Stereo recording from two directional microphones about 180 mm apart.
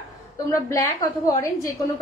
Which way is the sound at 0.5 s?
15° left (ahead or behind).